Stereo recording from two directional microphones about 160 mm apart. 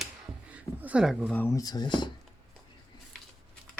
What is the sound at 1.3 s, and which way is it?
Speech, 15° left (ahead or behind).